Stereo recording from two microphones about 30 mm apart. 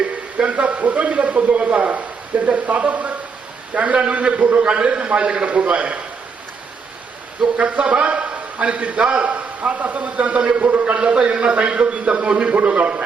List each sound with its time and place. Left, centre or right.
0.3 s a man's voice: right
7.6 s a man's voice: right
9.0 s a man's voice: right
10.9 s a man's voice: right